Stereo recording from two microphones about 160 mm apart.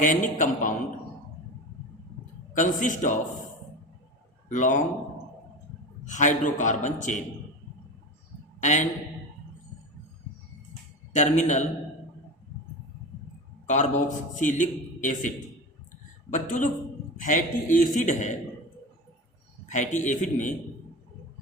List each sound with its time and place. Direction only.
0.0 s a man's voice: 55° left (ahead or behind)
2.5 s a man's voice: 55° left (ahead or behind)
4.4 s a man's voice: 50° left (ahead or behind)
6.1 s a man's voice: 50° left (ahead or behind)
8.6 s a man's voice: 50° left (ahead or behind)
11.1 s a man's voice: 50° left (ahead or behind)
13.7 s a man's voice: 50° left (ahead or behind)
16.3 s a man's voice: 55° left (ahead or behind)
19.6 s a man's voice: 50° left (ahead or behind)